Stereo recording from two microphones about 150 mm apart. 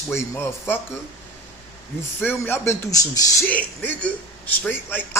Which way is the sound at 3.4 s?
10° left (ahead or behind).